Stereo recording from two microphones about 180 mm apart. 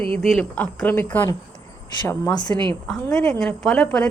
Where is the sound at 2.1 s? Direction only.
20° left (ahead or behind).